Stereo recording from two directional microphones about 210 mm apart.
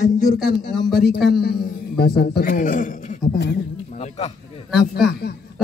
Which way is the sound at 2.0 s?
50° left (ahead or behind).